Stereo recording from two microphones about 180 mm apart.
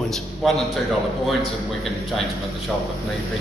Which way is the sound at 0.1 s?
Centre (ahead or behind).